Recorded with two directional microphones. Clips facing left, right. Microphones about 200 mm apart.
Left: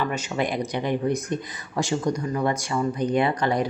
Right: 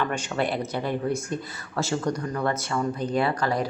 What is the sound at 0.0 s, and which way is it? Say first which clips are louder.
Speech: left 1 dB; 10° left (ahead or behind).